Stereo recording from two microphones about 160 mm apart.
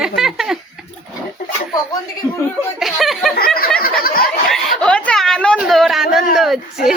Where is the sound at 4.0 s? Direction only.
65° left (ahead or behind).